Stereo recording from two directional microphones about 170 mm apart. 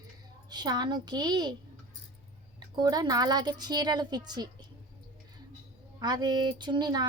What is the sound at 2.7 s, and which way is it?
Speech, 25° right (ahead or behind).